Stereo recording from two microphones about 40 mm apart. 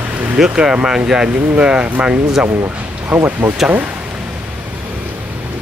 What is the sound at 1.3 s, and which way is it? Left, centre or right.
Speech, right.